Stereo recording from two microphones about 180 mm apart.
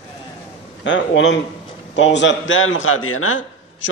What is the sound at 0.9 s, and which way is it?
A man's voice, 90° left.